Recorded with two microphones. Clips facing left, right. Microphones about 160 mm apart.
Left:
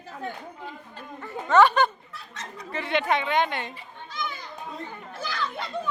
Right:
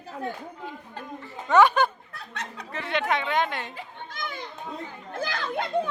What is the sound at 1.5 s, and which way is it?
Speech, 10° right (ahead or behind).